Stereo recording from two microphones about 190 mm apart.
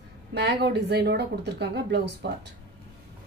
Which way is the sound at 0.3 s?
60° right (ahead or behind).